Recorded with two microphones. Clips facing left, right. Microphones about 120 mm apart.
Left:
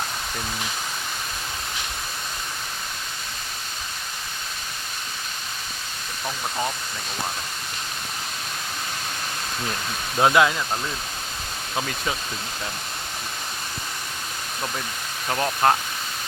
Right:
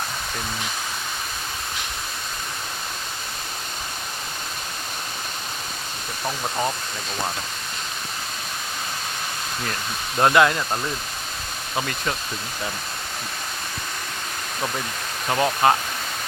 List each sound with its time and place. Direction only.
6.2 s speech: 15° right (ahead or behind)
10.2 s speech: centre (ahead or behind)
11.8 s speech: centre (ahead or behind)
15.3 s speech: 5° right (ahead or behind)